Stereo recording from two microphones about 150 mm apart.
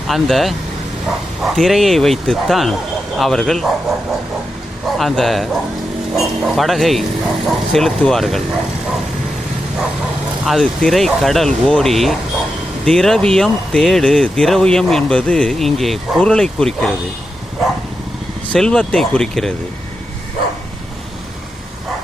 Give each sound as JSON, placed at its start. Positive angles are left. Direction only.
{"t": 0.1, "sound": "speech", "side_deg": 0}
{"t": 4.9, "sound": "speech", "side_deg": 0}
{"t": 10.4, "sound": "speech", "side_deg": 0}
{"t": 18.5, "sound": "speech", "side_deg": 5}